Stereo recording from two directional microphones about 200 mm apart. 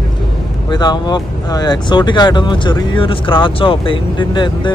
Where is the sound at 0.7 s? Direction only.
20° left (ahead or behind).